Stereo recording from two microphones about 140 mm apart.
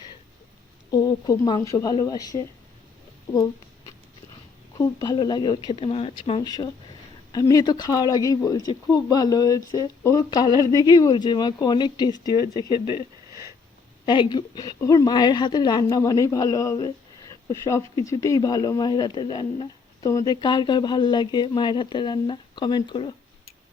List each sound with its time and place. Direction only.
0.9 s a woman's voice: 30° left (ahead or behind)
4.8 s speech: 30° left (ahead or behind)
5.9 s speech: 45° left (ahead or behind)
6.4 s a woman's voice: 30° left (ahead or behind)
12.8 s speech: 25° right (ahead or behind)
14.0 s a woman's voice: 35° left (ahead or behind)